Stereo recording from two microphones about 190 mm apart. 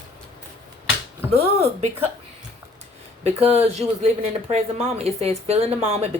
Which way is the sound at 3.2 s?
35° right (ahead or behind).